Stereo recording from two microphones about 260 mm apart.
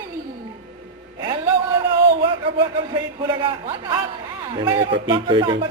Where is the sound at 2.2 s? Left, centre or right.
Centre.